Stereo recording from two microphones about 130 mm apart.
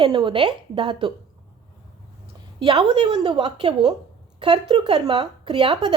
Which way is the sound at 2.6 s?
40° right (ahead or behind).